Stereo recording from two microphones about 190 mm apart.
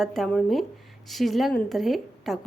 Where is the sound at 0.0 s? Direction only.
Centre (ahead or behind).